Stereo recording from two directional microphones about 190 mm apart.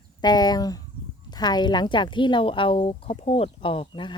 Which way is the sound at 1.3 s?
20° left (ahead or behind).